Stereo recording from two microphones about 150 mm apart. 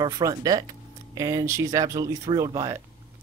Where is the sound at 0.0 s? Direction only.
25° right (ahead or behind).